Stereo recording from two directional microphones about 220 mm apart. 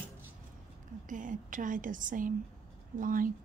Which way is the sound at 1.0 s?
35° right (ahead or behind).